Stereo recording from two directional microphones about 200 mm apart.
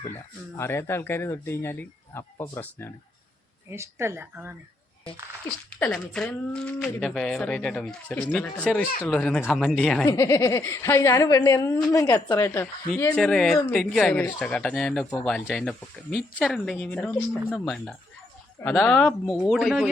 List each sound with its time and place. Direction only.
0.1 s speech: 15° left (ahead or behind)
3.7 s a woman's voice: 10° right (ahead or behind)
5.8 s speech: 5° left (ahead or behind)
10.1 s speech: 15° left (ahead or behind); by 19.9 s centre (ahead or behind)